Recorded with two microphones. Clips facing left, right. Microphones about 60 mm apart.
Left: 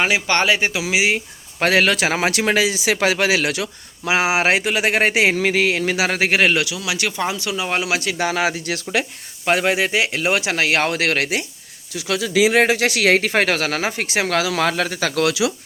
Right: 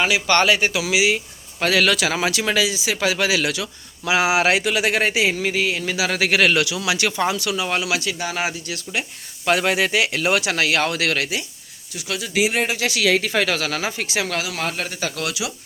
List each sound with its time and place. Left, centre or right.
0.3 s speech: centre; by 3.7 s left
4.0 s speech: left
5.1 s speech: left
6.1 s speech: left
6.5 s speech: centre
7.3 s speech: left
7.8 s speech: left
8.2 s speech: left
9.5 s speech: centre
10.7 s speech: left
11.9 s speech: left
12.8 s speech: left
14.8 s speech: left